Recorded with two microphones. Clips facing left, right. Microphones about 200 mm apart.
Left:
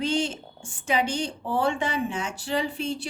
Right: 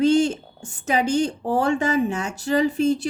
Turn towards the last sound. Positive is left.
turn(degrees=-40)  # may be behind; listen again after turning